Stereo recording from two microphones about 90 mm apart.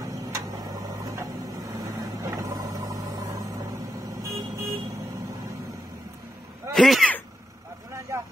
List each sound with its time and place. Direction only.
0.0 s printer: 40° right (ahead or behind)
4.1 s vehicle: 35° right (ahead or behind)
6.7 s a sound: 5° left (ahead or behind)